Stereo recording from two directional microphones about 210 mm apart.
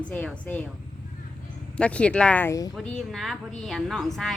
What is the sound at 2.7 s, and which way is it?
A woman's voice, centre (ahead or behind).